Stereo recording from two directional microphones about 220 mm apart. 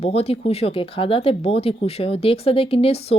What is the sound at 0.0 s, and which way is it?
Speech, 25° left (ahead or behind).